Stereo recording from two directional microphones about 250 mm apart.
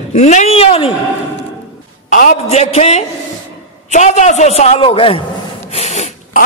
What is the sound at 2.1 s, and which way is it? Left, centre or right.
A man's voice, left.